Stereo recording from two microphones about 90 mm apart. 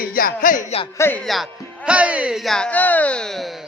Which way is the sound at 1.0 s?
25° left (ahead or behind).